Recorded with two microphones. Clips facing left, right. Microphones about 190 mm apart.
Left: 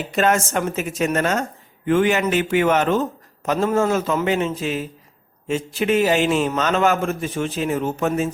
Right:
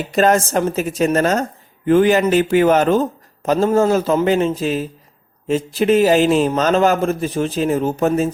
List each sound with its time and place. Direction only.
0.1 s a man's voice: 35° right (ahead or behind)